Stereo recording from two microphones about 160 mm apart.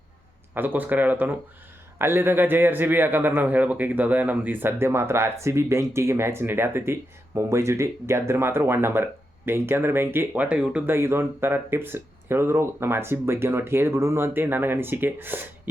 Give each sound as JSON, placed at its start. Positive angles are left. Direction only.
{"t": 0.5, "sound": "speech", "side_deg": -10}